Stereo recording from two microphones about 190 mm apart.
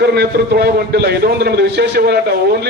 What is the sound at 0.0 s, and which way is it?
A man's voice, 60° right (ahead or behind).